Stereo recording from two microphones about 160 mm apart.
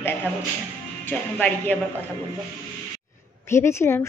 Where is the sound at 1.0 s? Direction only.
10° left (ahead or behind).